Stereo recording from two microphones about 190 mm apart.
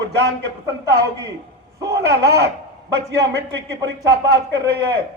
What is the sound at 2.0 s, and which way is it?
Speech, 60° right (ahead or behind).